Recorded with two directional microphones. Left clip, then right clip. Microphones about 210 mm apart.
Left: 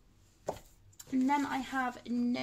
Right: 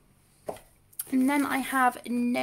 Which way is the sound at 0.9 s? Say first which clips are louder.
Right 5 dB; 45° right (ahead or behind).